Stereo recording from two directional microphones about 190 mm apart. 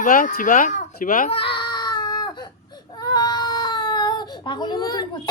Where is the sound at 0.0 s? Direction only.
45° left (ahead or behind).